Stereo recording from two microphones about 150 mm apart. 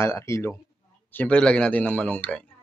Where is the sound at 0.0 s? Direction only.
20° left (ahead or behind).